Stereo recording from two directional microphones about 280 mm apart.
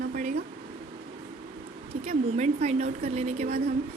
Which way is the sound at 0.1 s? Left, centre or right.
Right.